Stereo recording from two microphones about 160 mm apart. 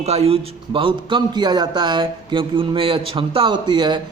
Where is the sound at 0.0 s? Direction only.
40° right (ahead or behind).